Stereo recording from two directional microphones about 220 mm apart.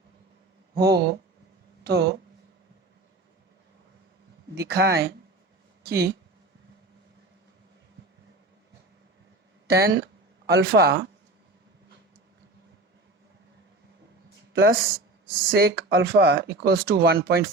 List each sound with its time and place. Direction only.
0.8 s speech: 50° right (ahead or behind)
4.5 s speech: 50° right (ahead or behind)
9.6 s speech: 45° right (ahead or behind)
14.5 s speech: 45° right (ahead or behind)